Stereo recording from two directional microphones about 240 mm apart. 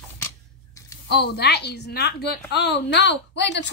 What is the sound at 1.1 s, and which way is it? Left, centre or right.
A woman's voice, left.